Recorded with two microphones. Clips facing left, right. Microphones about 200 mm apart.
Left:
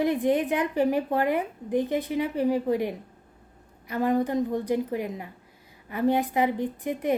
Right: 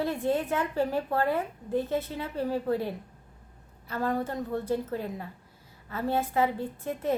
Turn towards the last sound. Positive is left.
turn(degrees=15)  # may be behind; listen again after turning